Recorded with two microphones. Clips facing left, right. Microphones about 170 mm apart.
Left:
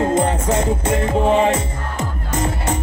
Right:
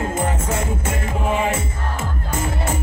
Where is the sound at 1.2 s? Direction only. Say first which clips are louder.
Left 3 dB; 30° left (ahead or behind).